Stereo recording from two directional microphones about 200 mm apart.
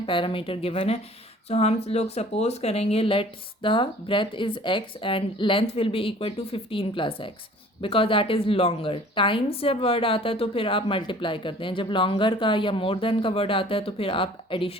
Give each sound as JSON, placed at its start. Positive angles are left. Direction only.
{"t": 0.0, "sound": "a woman's voice", "side_deg": 25}